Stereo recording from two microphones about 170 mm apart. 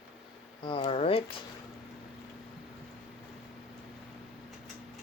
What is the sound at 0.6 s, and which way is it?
Speech, 30° left (ahead or behind).